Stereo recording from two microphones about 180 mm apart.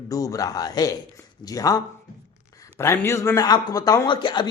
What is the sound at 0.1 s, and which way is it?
A man's voice, 20° left (ahead or behind).